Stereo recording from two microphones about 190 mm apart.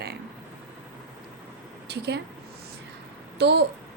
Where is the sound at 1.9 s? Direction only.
60° right (ahead or behind).